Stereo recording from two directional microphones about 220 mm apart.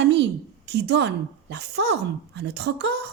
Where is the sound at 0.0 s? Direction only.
50° right (ahead or behind).